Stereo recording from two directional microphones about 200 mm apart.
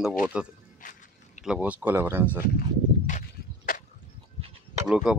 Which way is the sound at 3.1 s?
40° left (ahead or behind).